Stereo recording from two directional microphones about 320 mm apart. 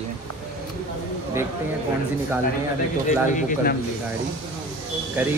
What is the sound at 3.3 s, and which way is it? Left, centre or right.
Speech, left.